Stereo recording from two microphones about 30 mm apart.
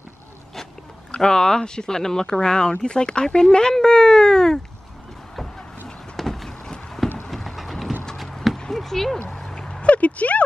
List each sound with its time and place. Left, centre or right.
1.2 s speech: left
6.1 s vehicle: centre
7.2 s train: centre
8.7 s speech: centre
9.6 s a sound: left
9.8 s a sound: left